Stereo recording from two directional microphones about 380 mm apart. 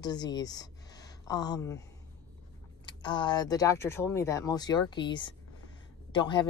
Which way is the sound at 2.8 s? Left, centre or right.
Centre.